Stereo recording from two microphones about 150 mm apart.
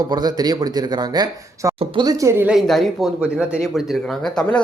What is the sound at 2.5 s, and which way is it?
Speech, centre (ahead or behind).